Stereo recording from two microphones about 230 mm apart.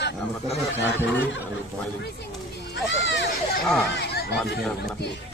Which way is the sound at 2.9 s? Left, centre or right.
Left.